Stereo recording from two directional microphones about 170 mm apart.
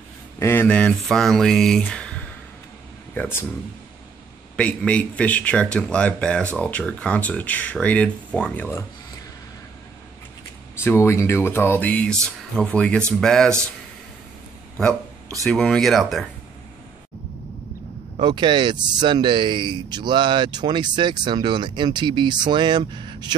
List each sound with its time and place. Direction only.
0.4 s speech: 15° left (ahead or behind)
4.6 s speech: 10° left (ahead or behind)
10.8 s speech: 15° left (ahead or behind)
15.4 s speech: centre (ahead or behind)
18.2 s speech: 25° right (ahead or behind)